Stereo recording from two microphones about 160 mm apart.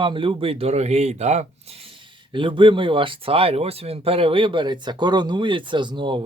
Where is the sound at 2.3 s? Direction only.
30° right (ahead or behind).